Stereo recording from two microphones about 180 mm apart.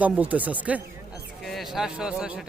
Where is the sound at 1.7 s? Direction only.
5° right (ahead or behind).